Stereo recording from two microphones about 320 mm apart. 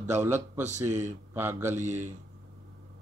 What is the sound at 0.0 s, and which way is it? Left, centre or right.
Speech, centre.